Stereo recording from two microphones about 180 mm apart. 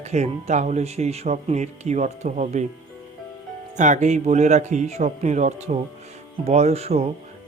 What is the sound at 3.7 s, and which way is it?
Speech, 40° right (ahead or behind).